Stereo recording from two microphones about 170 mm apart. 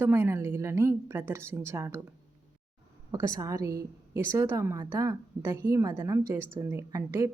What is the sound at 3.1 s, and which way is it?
A woman's voice, 20° right (ahead or behind).